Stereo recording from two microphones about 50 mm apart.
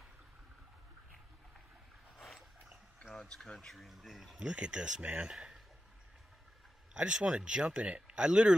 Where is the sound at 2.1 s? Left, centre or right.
Centre.